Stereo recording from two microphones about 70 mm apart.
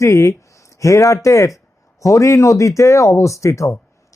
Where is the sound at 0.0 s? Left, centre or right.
Left.